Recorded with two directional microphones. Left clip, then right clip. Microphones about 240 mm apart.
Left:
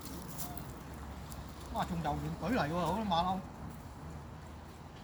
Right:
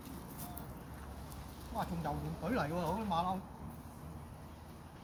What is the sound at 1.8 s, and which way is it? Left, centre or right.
Speech, centre.